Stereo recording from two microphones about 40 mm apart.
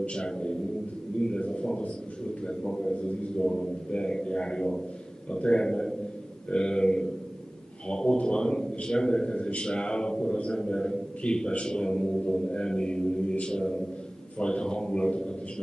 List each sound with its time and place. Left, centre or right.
0.1 s a man's voice: left
1.3 s a sound: left
2.4 s a man's voice: centre